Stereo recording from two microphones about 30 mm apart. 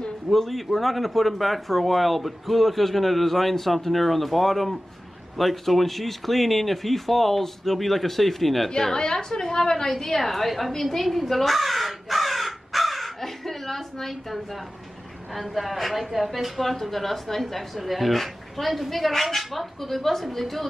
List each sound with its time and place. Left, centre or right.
0.3 s a woman's voice: centre
8.6 s a woman's voice: centre
9.8 s a woman's voice: centre